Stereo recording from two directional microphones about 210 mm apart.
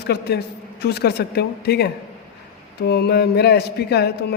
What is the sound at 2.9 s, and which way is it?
A woman's voice, 50° left (ahead or behind).